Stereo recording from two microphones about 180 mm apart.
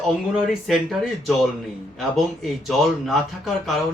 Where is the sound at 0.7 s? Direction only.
Centre (ahead or behind).